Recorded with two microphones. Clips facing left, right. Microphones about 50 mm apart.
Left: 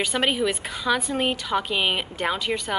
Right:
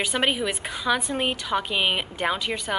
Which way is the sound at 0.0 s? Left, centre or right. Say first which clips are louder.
Left 1 dB; centre.